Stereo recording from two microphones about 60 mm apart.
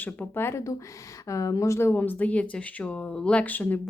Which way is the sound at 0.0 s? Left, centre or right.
Left.